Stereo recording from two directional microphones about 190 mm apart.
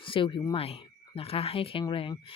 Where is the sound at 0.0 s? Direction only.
25° left (ahead or behind).